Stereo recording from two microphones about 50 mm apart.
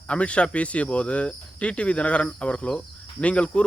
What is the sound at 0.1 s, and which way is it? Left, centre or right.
Speech, left.